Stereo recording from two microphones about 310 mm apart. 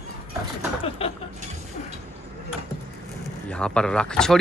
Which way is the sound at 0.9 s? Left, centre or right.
Centre.